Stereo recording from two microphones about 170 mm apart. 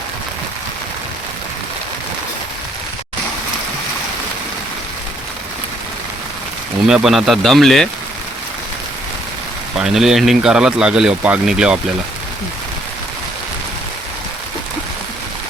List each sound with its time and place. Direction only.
6.8 s speech: 5° right (ahead or behind)
9.7 s speech: 5° right (ahead or behind)